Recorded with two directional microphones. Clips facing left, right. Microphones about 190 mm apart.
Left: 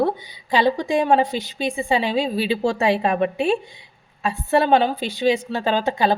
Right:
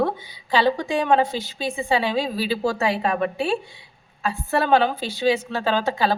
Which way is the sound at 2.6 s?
25° left (ahead or behind).